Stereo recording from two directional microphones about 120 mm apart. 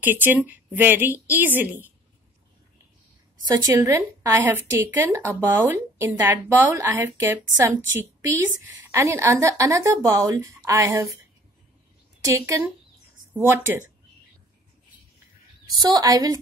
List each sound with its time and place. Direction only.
0.0 s a woman's voice: 15° right (ahead or behind)
3.4 s a woman's voice: 30° right (ahead or behind)
12.3 s a woman's voice: 25° right (ahead or behind)
15.7 s a woman's voice: 35° right (ahead or behind)